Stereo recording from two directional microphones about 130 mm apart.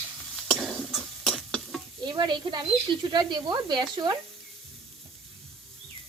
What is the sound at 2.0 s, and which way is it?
Speech, 35° right (ahead or behind).